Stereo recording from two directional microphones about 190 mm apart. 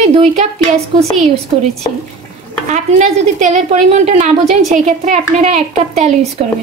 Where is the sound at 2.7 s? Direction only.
40° right (ahead or behind).